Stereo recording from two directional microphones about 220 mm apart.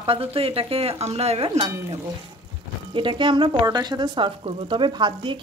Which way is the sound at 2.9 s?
20° right (ahead or behind).